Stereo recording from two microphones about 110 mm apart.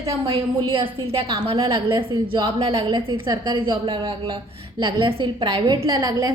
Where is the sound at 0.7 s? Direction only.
55° right (ahead or behind).